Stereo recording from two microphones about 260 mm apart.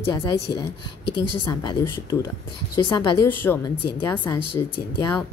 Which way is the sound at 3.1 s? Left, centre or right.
Left.